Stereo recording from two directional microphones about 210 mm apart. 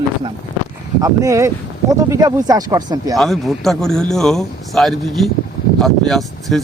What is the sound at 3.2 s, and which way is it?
Speech, centre (ahead or behind).